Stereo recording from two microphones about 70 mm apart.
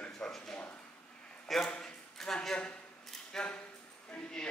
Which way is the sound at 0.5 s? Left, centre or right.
Left.